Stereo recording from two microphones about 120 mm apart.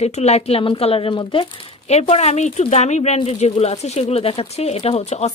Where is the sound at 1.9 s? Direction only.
65° left (ahead or behind).